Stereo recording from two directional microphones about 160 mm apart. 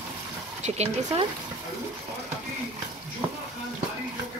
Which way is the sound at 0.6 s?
45° right (ahead or behind).